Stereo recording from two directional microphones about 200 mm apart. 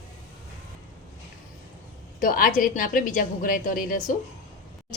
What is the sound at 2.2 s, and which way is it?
A woman's voice, 45° left (ahead or behind).